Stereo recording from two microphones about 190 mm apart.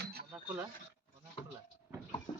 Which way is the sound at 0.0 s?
55° right (ahead or behind).